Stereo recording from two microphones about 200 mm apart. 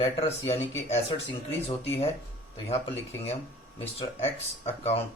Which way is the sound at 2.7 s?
30° left (ahead or behind).